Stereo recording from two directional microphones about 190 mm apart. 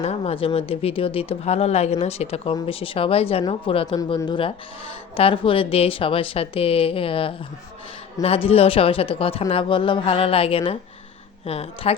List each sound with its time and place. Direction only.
0.0 s speech: 35° left (ahead or behind)